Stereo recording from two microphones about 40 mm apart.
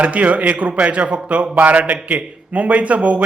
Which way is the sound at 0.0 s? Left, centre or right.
Right.